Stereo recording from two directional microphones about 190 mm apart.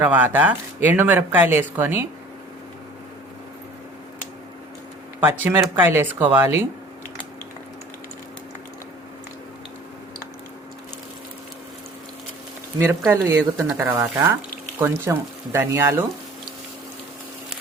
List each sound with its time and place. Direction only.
0.0 s speech: 10° right (ahead or behind)
5.2 s speech: 10° right (ahead or behind)
13.1 s speech: 15° right (ahead or behind)